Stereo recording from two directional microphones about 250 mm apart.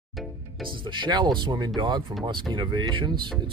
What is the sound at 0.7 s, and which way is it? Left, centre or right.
Speech, centre.